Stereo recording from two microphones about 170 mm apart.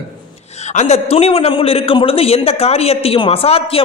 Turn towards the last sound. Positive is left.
turn(degrees=35)  # may be behind; listen again after turning